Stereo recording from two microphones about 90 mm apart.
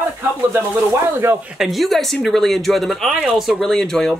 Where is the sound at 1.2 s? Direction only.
30° right (ahead or behind).